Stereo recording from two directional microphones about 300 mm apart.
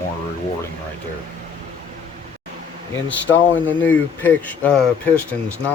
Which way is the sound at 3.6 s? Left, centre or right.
Centre.